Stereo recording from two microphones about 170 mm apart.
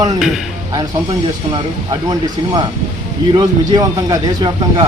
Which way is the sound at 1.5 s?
25° right (ahead or behind).